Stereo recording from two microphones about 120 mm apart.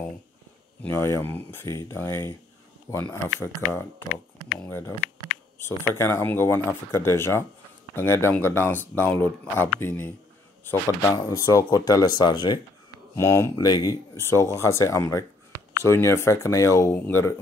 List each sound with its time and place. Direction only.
0.8 s speech: 20° left (ahead or behind); by 12.5 s 40° left (ahead or behind)
13.1 s speech: 25° left (ahead or behind)